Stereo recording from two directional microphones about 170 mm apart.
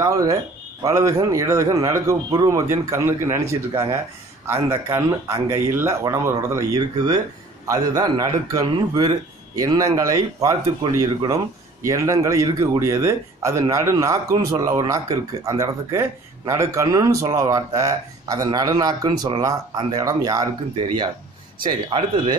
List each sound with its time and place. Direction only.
0.0 s a man's voice: 20° right (ahead or behind)